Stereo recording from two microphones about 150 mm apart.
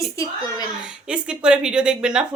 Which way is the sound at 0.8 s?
5° right (ahead or behind).